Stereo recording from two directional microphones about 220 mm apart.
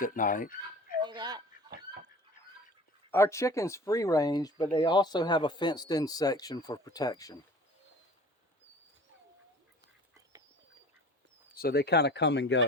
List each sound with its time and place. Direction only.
0.0 s speech: 35° left (ahead or behind)
1.0 s a sound: 20° right (ahead or behind)
3.1 s speech: 10° left (ahead or behind)
11.5 s speech: 45° left (ahead or behind)